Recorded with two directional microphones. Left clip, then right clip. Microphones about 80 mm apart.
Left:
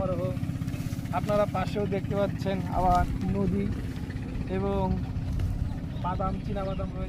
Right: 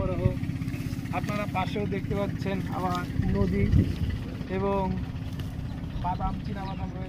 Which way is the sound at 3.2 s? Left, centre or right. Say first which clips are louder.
Right 1 dB; centre.